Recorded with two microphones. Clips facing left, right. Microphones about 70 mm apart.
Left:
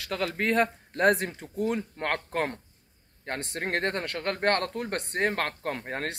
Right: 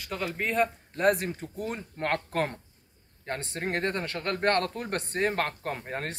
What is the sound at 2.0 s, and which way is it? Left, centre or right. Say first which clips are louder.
Speech: right 4 dB; left.